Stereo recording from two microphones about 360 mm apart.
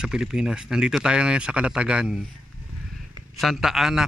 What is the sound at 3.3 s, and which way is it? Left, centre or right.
Speech, centre.